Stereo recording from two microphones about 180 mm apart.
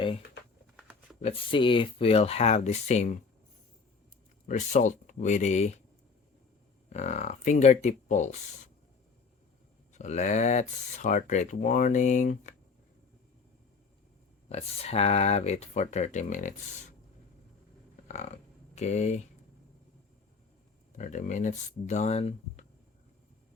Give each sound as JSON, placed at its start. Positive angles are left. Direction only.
{"t": 0.8, "sound": "a sound", "side_deg": -5}
{"t": 1.2, "sound": "speech", "side_deg": 30}
{"t": 4.4, "sound": "speech", "side_deg": 45}
{"t": 6.9, "sound": "speech", "side_deg": 40}
{"t": 9.9, "sound": "speech", "side_deg": 40}
{"t": 14.5, "sound": "speech", "side_deg": 35}
{"t": 18.7, "sound": "speech", "side_deg": 40}
{"t": 20.9, "sound": "speech", "side_deg": 45}